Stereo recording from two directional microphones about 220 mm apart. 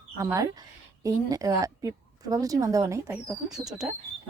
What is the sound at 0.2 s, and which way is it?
A woman's voice, 15° right (ahead or behind).